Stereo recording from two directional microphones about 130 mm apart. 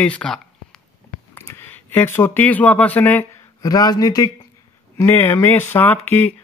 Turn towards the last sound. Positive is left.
turn(degrees=15)  # may be behind; listen again after turning